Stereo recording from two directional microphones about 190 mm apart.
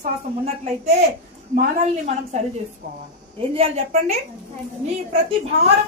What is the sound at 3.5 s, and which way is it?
Speech, 35° right (ahead or behind).